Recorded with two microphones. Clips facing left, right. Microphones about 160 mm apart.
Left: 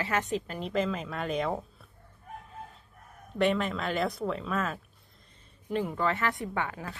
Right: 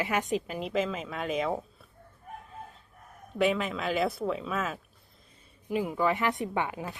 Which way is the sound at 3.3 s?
5° right (ahead or behind).